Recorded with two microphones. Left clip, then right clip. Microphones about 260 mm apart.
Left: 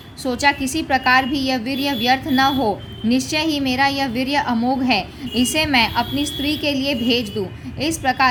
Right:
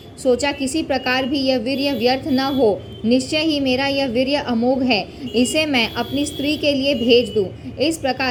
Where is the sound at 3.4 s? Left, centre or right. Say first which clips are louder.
Right 2 dB; left.